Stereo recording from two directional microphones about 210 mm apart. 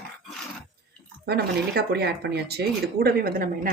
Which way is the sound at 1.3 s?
50° right (ahead or behind).